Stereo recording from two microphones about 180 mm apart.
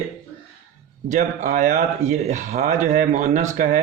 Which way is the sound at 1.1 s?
45° right (ahead or behind).